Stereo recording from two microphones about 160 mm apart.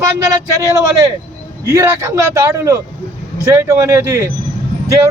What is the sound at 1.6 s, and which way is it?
A man's voice, 15° right (ahead or behind).